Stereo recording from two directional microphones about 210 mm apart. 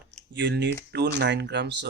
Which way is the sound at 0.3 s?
55° right (ahead or behind).